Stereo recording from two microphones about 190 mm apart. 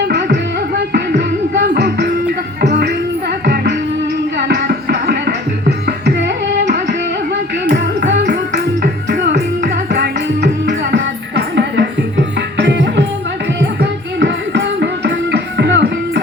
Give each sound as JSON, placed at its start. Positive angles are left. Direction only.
{"t": 0.0, "sound": "music", "side_deg": -65}
{"t": 7.6, "sound": "a sound", "side_deg": -65}
{"t": 8.8, "sound": "music", "side_deg": -60}